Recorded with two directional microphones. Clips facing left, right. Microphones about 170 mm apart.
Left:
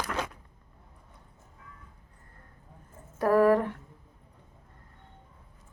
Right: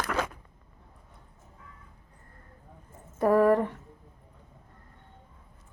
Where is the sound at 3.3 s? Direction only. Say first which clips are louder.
Even; 5° left (ahead or behind).